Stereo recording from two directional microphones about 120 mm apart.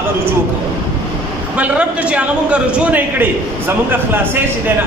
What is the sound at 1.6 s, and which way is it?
A man's voice, 10° right (ahead or behind).